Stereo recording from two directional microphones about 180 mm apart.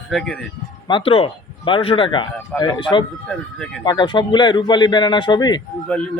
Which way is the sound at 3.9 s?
25° left (ahead or behind).